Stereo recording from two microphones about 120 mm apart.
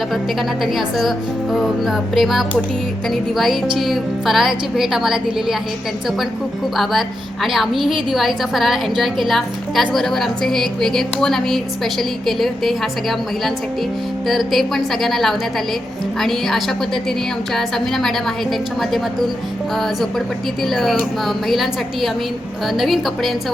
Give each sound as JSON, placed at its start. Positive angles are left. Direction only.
{"t": 0.6, "sound": "a woman's voice", "side_deg": 0}
{"t": 7.4, "sound": "a woman's voice", "side_deg": 0}
{"t": 19.7, "sound": "a woman's voice", "side_deg": 0}